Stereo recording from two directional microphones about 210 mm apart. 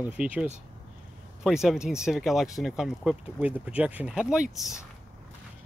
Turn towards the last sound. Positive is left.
turn(degrees=-5)  # may be behind; listen again after turning